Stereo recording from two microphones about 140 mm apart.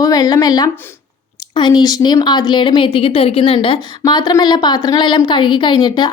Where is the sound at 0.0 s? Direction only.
25° left (ahead or behind).